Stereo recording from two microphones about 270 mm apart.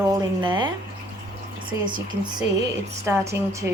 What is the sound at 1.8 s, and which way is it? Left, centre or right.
Speech, centre.